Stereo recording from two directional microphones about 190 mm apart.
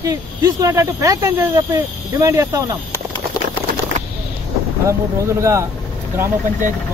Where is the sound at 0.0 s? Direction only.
20° right (ahead or behind).